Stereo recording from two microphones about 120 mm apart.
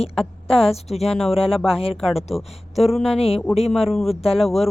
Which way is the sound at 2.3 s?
Centre (ahead or behind).